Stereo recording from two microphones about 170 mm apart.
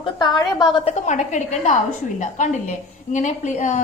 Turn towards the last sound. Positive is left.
turn(degrees=45)  # may be behind; listen again after turning